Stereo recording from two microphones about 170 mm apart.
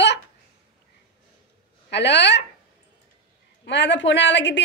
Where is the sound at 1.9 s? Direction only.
90° left.